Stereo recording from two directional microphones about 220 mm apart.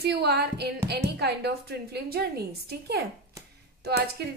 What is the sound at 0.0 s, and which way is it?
Speech, 50° right (ahead or behind).